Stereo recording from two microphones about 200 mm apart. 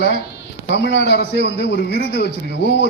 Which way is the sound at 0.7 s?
60° left (ahead or behind).